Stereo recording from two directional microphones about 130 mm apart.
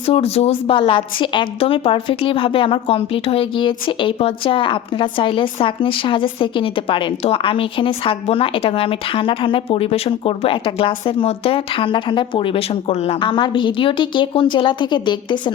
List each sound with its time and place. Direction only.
0.0 s a woman's voice: 50° left (ahead or behind)